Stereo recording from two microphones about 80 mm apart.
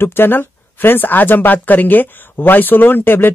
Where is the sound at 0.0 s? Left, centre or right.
Left.